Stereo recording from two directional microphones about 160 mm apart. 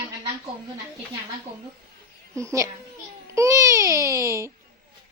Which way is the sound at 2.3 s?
20° right (ahead or behind).